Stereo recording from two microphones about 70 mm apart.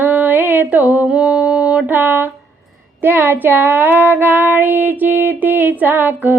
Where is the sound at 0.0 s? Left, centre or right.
Right.